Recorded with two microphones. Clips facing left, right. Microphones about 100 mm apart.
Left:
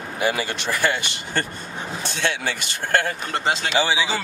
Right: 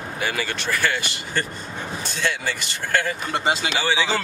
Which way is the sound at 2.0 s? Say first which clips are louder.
Left 1 dB; 40° right (ahead or behind).